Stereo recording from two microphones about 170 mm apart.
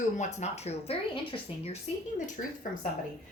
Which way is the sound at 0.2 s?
40° left (ahead or behind).